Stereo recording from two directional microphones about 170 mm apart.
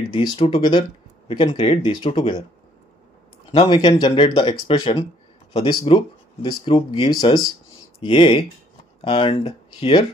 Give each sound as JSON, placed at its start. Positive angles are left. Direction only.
{"t": 0.1, "sound": "speech", "side_deg": 30}
{"t": 3.5, "sound": "speech", "side_deg": 35}